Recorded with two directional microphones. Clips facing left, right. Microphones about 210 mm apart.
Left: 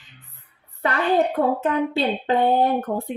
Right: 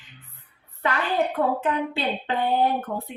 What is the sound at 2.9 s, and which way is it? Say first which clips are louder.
Speech: left 5 dB; 45° left (ahead or behind).